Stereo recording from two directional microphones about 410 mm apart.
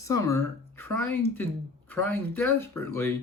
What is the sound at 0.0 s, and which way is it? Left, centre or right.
Speech, centre.